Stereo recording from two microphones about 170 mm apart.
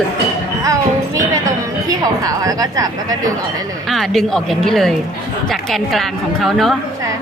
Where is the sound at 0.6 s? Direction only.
20° right (ahead or behind).